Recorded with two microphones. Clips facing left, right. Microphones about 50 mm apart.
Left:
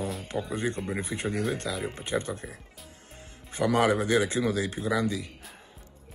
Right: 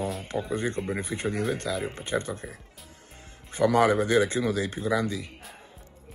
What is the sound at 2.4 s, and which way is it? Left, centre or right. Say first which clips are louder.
Speech: right 1 dB; centre.